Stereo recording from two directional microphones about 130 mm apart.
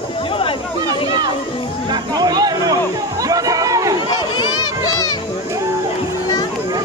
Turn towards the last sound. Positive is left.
turn(degrees=30)  # may be behind; listen again after turning